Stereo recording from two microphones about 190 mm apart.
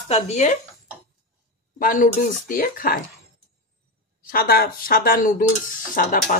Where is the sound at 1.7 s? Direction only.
45° left (ahead or behind).